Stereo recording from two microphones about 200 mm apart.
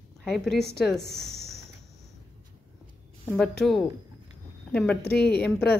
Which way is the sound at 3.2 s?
5° left (ahead or behind).